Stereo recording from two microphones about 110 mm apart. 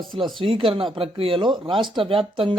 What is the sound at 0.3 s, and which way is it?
A man's voice, 50° right (ahead or behind).